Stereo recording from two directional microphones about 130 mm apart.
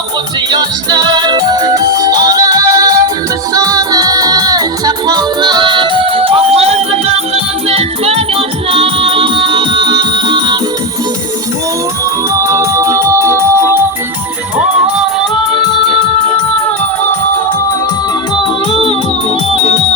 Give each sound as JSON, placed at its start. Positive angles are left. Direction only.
{"t": 0.5, "sound": "music", "side_deg": -35}
{"t": 12.4, "sound": "music", "side_deg": -20}